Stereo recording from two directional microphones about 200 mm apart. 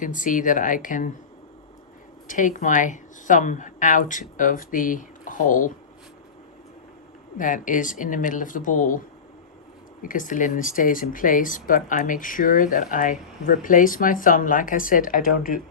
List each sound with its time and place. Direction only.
0.0 s speech: 40° left (ahead or behind)
2.2 s speech: 40° left (ahead or behind)
7.3 s speech: 40° left (ahead or behind)
10.0 s speech: 40° left (ahead or behind)